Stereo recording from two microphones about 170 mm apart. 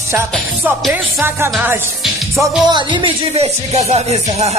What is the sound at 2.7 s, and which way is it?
Music, 25° right (ahead or behind).